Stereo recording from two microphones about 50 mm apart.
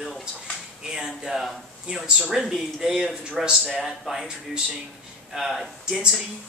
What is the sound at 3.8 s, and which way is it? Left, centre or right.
Speech, centre.